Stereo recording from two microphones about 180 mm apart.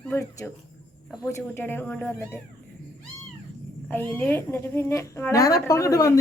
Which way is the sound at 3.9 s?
10° left (ahead or behind).